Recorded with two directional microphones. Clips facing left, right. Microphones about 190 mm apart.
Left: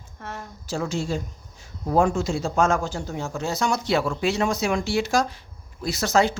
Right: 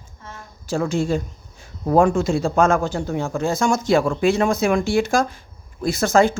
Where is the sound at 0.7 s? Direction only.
55° right (ahead or behind).